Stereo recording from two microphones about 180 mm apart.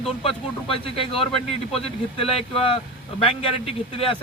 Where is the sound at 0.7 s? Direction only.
30° left (ahead or behind).